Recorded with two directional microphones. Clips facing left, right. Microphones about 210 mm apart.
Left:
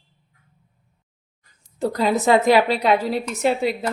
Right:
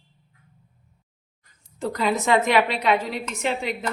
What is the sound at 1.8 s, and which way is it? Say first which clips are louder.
A woman's voice: left 4 dB; 35° left (ahead or behind).